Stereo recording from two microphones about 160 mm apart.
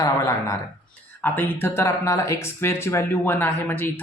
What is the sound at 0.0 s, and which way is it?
Speech, 20° left (ahead or behind).